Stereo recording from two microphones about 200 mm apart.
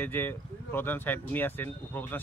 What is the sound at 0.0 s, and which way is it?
Speech, 10° left (ahead or behind).